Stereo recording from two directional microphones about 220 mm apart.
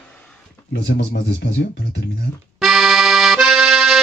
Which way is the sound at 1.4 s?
45° left (ahead or behind).